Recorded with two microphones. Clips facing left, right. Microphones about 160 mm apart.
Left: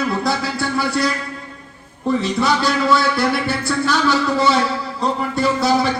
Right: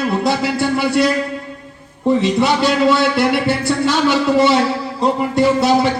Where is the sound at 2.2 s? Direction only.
20° right (ahead or behind).